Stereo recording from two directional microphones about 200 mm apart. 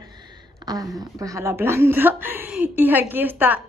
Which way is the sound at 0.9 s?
15° right (ahead or behind).